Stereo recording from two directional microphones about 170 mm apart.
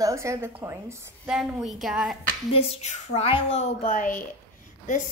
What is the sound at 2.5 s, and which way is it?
A woman's voice, 35° left (ahead or behind).